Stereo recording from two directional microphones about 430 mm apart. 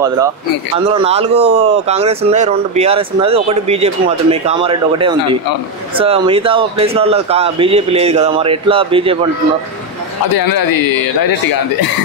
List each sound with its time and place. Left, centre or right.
0.8 s speech: centre
10.3 s speech: left